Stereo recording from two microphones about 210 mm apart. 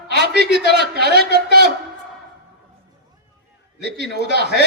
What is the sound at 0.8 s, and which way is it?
Speech, 50° right (ahead or behind).